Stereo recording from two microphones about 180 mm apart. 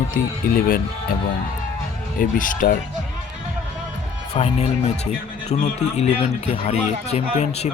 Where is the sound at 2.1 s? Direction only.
50° left (ahead or behind).